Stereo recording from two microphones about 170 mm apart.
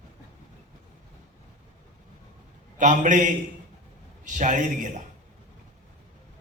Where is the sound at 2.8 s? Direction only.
45° right (ahead or behind).